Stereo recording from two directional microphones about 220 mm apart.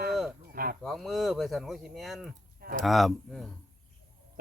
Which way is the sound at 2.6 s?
40° right (ahead or behind).